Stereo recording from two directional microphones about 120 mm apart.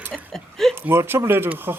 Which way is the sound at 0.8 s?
20° right (ahead or behind).